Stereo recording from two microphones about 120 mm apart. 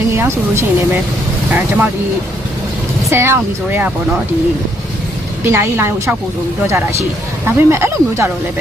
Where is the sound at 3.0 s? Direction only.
20° right (ahead or behind).